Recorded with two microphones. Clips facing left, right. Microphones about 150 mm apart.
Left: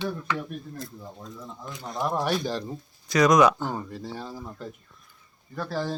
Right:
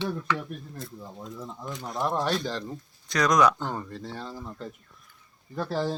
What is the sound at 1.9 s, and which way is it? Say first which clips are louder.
Speech: left 1 dB; centre (ahead or behind).